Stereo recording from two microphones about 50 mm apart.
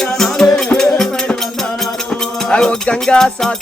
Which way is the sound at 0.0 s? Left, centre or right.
Centre.